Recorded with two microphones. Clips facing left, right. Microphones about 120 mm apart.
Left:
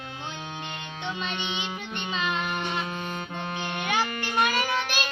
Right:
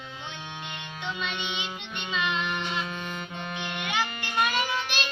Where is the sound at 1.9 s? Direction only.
40° left (ahead or behind).